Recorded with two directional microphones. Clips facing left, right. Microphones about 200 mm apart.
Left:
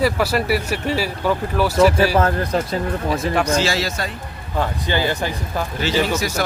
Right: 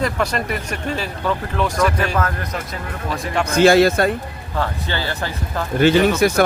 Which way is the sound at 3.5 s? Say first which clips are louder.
Right 8 dB; 55° right (ahead or behind).